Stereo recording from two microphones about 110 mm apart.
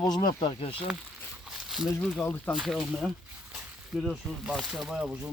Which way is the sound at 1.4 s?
5° right (ahead or behind).